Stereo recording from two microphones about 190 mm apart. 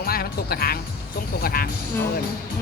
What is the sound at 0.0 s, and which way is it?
Music, 55° left (ahead or behind).